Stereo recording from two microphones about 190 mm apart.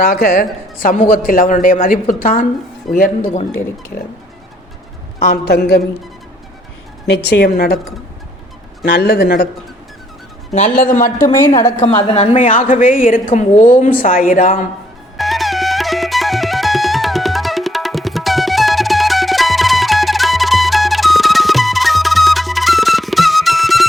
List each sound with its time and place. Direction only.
0.0 s a woman's voice: 50° left (ahead or behind)
5.2 s a woman's voice: 50° left (ahead or behind)
7.1 s a woman's voice: 60° left (ahead or behind)
8.8 s a woman's voice: 55° left (ahead or behind)
10.5 s a woman's voice: 40° left (ahead or behind)
11.3 s a woman's voice: 15° left (ahead or behind)
11.8 s a woman's voice: 25° left (ahead or behind); by 14.6 s 45° left (ahead or behind)
15.2 s music: centre (ahead or behind)